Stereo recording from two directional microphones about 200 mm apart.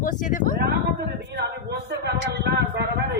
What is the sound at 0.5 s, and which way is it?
Speech, 55° right (ahead or behind).